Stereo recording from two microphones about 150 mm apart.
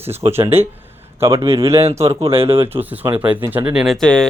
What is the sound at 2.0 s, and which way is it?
Speech, 40° right (ahead or behind).